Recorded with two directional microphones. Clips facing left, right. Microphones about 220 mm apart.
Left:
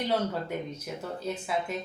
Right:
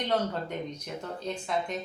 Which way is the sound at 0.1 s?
5° left (ahead or behind).